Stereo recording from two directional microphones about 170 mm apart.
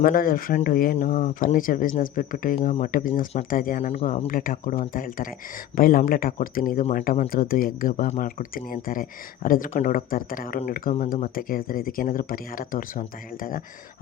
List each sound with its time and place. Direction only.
0.0 s speech: 55° left (ahead or behind); by 4.3 s 40° left (ahead or behind)
4.3 s speech: 55° left (ahead or behind)